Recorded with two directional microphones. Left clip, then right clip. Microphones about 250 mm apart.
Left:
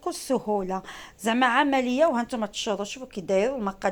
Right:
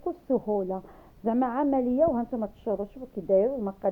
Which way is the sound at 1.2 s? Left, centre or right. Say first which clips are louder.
Left 5 dB; centre.